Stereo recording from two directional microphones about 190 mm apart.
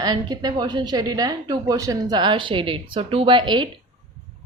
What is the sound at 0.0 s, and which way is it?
A woman's voice, 20° right (ahead or behind).